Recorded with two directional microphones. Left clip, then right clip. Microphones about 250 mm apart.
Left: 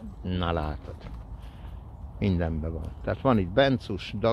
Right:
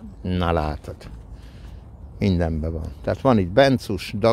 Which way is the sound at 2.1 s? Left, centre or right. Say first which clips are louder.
Right 6 dB; right.